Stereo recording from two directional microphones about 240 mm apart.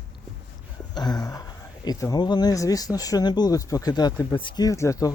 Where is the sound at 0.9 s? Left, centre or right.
Centre.